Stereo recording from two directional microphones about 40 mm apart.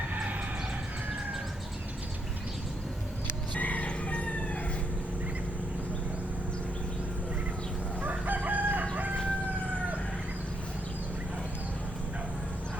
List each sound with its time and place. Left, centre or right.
0.1 s emergency vehicle: right
3.5 s crowing: left
8.0 s chicken: right